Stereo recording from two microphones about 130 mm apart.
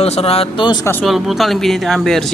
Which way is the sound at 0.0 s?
50° left (ahead or behind).